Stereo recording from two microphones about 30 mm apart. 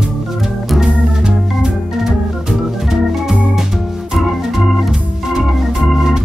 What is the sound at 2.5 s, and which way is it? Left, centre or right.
Organ, centre.